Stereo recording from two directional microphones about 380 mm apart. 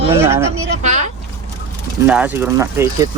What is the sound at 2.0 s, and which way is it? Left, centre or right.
Speech, centre.